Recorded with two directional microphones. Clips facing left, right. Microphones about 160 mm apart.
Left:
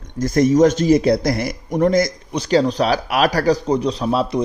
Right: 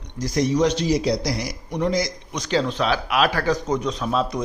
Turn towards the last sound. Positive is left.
turn(degrees=30)  # may be behind; listen again after turning